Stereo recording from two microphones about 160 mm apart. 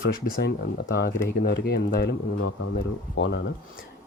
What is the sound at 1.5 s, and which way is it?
A man's voice, 80° left.